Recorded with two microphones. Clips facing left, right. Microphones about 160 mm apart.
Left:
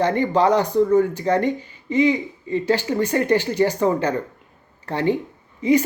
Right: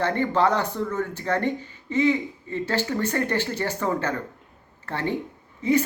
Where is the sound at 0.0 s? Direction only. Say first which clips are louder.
Left 4 dB; 15° left (ahead or behind).